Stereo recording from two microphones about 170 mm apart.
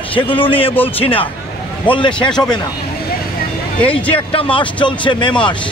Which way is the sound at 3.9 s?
30° left (ahead or behind).